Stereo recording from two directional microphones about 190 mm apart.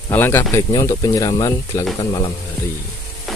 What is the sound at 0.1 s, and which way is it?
Speech, 10° left (ahead or behind).